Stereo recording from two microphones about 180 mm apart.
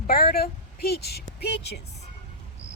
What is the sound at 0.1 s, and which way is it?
A woman's voice, 55° left (ahead or behind).